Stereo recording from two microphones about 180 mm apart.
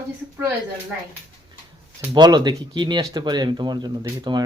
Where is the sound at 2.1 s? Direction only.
20° right (ahead or behind).